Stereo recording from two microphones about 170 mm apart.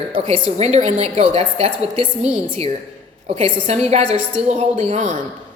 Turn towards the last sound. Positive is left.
turn(degrees=-45)  # may be behind; listen again after turning